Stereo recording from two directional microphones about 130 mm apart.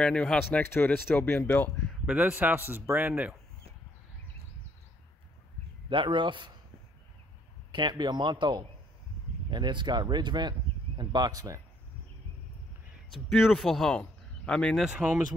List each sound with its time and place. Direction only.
0.0 s speech: 10° left (ahead or behind)
2.0 s speech: 10° right (ahead or behind)
5.9 s speech: 40° right (ahead or behind)
7.7 s speech: 35° right (ahead or behind)
13.1 s speech: centre (ahead or behind)
14.9 s speech: 10° right (ahead or behind)